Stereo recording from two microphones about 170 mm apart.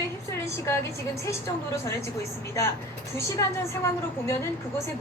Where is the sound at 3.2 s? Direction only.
15° left (ahead or behind).